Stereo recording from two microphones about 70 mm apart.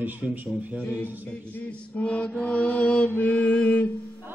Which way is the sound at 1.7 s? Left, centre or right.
Centre.